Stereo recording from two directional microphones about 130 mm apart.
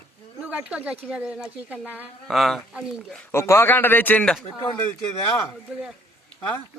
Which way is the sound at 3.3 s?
20° left (ahead or behind).